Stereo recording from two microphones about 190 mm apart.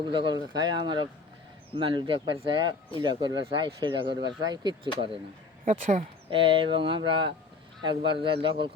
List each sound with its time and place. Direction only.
0.0 s speech: 25° right (ahead or behind)
5.6 s speech: 35° right (ahead or behind)